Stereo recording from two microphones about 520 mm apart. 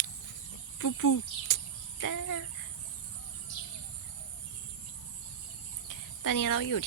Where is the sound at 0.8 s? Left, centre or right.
Left.